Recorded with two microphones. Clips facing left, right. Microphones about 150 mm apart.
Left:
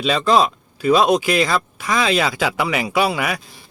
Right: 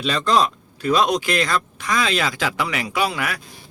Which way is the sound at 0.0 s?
10° left (ahead or behind).